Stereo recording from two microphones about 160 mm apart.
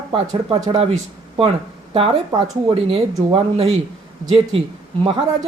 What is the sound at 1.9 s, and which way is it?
Speech, 35° right (ahead or behind).